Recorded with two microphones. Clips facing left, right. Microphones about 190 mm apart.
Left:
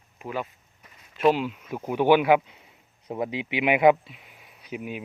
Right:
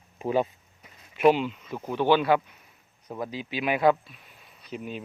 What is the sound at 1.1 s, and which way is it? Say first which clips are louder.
Speech: right 1 dB; centre (ahead or behind).